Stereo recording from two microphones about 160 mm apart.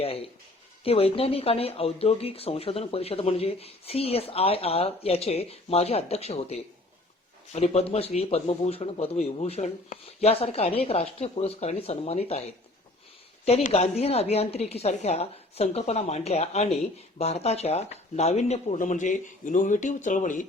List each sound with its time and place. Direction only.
0.0 s speech: 35° left (ahead or behind)
13.4 s speech: 45° left (ahead or behind)